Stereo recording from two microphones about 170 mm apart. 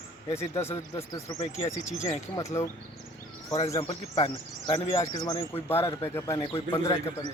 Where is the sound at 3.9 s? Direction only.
30° left (ahead or behind).